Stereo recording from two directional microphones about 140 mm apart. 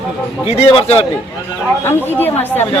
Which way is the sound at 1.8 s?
15° left (ahead or behind).